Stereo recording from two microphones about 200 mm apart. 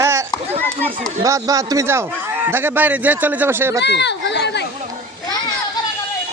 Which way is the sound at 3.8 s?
60° left (ahead or behind).